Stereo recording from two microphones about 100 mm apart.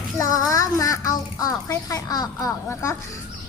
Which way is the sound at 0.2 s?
35° left (ahead or behind).